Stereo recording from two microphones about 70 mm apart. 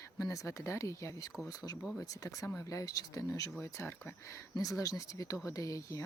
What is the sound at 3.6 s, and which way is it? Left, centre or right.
Speech, left.